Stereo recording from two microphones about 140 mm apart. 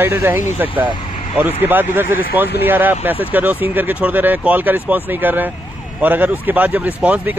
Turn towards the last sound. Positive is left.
turn(degrees=-10)  # may be behind; listen again after turning